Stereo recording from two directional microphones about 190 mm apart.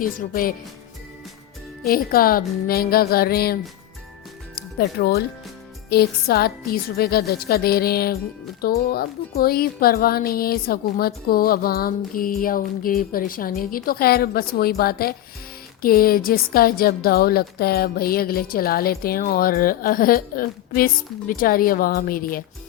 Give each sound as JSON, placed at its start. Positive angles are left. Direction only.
{"t": 0.0, "sound": "a woman's voice", "side_deg": 50}
{"t": 1.9, "sound": "a woman's voice", "side_deg": 50}
{"t": 4.8, "sound": "a woman's voice", "side_deg": 55}